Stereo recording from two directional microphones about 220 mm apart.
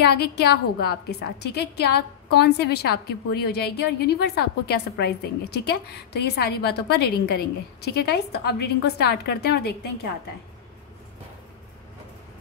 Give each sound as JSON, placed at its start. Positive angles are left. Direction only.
{"t": 0.0, "sound": "a woman's voice", "side_deg": 50}